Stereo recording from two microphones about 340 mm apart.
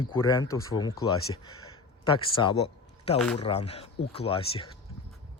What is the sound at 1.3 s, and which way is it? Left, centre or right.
Speech, left.